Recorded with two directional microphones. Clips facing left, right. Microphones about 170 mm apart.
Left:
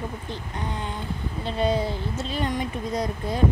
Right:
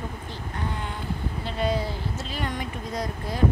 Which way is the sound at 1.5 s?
25° left (ahead or behind).